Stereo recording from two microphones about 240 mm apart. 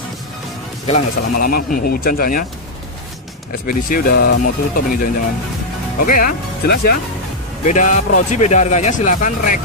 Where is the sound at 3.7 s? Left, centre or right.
Left.